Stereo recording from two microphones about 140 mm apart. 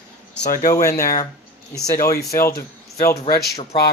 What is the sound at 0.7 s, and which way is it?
Speech, 25° left (ahead or behind).